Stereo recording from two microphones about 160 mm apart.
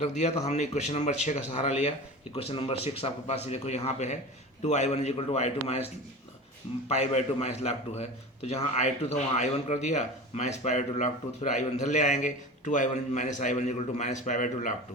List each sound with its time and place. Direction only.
0.0 s a man's voice: 45° left (ahead or behind)
6.8 s a man's voice: 40° left (ahead or behind)